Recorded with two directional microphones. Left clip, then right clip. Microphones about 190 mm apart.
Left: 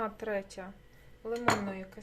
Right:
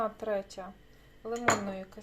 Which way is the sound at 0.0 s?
10° left (ahead or behind).